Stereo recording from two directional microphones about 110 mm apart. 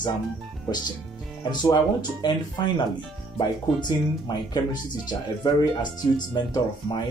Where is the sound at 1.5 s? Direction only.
40° left (ahead or behind).